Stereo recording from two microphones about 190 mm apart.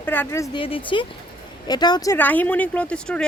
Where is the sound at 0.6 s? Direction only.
25° left (ahead or behind).